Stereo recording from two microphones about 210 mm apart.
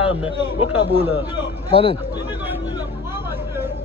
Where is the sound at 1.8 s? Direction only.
25° left (ahead or behind).